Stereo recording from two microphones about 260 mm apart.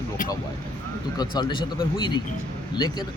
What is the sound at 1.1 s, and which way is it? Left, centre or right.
Speech, centre.